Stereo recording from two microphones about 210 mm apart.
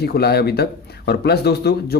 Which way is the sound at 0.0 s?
50° left (ahead or behind).